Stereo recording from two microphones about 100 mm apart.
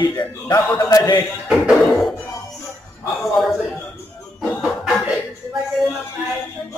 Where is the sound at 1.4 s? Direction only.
5° right (ahead or behind).